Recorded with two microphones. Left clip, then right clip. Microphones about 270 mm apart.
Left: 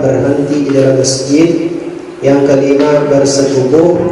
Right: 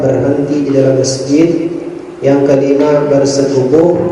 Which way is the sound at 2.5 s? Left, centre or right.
Centre.